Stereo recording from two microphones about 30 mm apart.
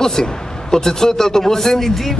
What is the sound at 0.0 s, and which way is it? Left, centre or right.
A man's voice, centre.